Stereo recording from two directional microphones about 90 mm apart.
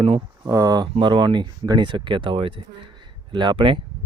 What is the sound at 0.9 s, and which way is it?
Speech, 60° right (ahead or behind).